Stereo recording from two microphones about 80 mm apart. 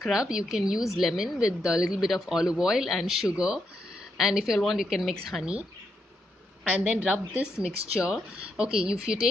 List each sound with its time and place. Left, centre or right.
0.0 s a woman's voice: centre
6.8 s a woman's voice: centre